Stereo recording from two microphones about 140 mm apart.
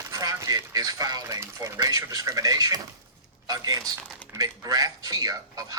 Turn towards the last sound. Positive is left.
turn(degrees=-25)  # may be behind; listen again after turning